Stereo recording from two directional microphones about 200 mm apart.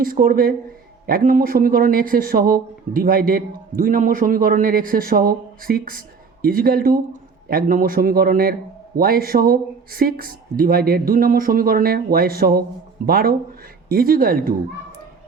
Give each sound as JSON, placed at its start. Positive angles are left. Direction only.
{"t": 0.0, "sound": "speech", "side_deg": -45}